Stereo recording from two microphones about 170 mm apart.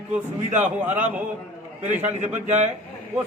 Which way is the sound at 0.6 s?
10° right (ahead or behind).